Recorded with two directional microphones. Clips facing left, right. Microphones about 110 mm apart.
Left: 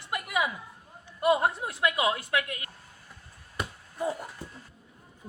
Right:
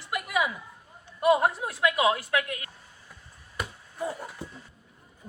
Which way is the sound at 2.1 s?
25° left (ahead or behind).